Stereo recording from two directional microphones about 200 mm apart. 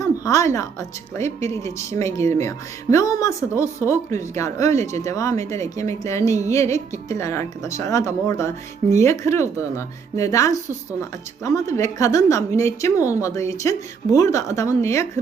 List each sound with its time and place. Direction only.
0.0 s a woman's voice: 15° left (ahead or behind)